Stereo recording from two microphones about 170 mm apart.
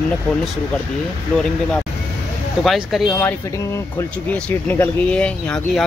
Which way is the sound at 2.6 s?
Centre (ahead or behind).